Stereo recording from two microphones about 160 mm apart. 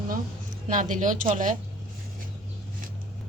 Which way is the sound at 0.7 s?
50° right (ahead or behind).